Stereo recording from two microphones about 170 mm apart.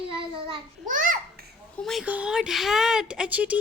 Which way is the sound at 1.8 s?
Centre (ahead or behind).